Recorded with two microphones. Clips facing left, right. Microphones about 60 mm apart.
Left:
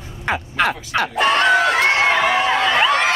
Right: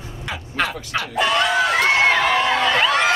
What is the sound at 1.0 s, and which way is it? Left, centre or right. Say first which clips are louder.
Speech: left 3 dB; left.